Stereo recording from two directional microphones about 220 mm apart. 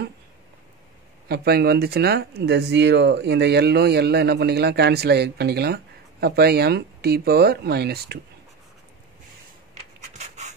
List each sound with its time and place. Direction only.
1.3 s speech: 45° right (ahead or behind)
10.1 s pant: 30° right (ahead or behind)